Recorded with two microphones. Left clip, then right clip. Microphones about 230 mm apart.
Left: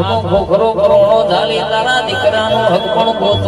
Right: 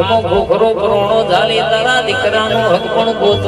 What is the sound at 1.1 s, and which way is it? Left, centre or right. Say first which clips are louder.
Music: even; right.